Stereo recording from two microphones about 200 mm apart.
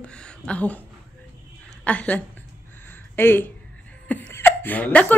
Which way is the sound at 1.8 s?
5° left (ahead or behind).